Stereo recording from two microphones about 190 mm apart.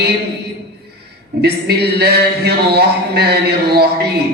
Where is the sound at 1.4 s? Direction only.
60° right (ahead or behind).